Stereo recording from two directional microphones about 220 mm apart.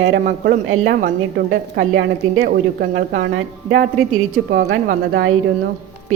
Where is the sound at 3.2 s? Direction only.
50° right (ahead or behind).